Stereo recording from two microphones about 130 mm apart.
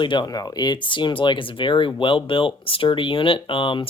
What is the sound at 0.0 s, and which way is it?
Speech, 35° left (ahead or behind).